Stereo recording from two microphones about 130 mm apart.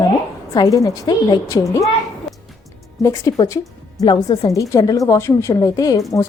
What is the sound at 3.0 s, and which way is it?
A woman's voice, 25° left (ahead or behind).